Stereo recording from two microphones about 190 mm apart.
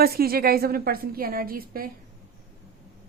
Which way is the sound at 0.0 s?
55° right (ahead or behind).